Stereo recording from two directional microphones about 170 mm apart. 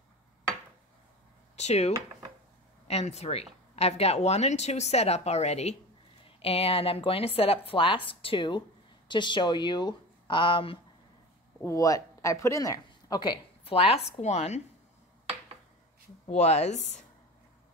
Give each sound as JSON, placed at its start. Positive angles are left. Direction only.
{"t": 1.6, "sound": "speech", "side_deg": 40}
{"t": 11.6, "sound": "a woman's voice", "side_deg": 20}
{"t": 16.3, "sound": "speech", "side_deg": 40}